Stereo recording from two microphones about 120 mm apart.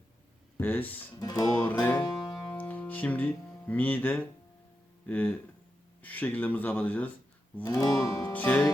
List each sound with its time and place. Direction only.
0.6 s speech: 15° left (ahead or behind)
1.2 s music: 30° left (ahead or behind)
2.6 s speech: 15° left (ahead or behind)
7.6 s music: 30° left (ahead or behind)
8.3 s speech: 15° left (ahead or behind)